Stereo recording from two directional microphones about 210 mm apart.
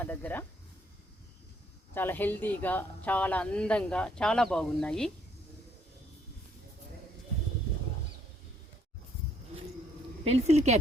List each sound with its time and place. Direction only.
0.0 s speech: 10° left (ahead or behind)
1.9 s speech: 10° left (ahead or behind)
10.2 s speech: 30° right (ahead or behind)